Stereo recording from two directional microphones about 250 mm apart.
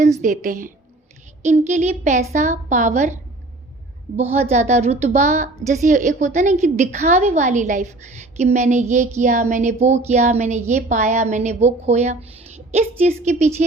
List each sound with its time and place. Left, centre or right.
0.2 s a woman's voice: right
4.2 s a woman's voice: right